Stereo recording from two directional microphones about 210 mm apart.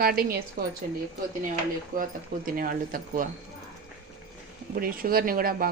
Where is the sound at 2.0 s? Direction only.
40° right (ahead or behind).